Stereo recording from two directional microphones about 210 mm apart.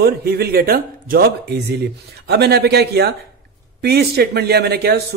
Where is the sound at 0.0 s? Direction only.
50° right (ahead or behind).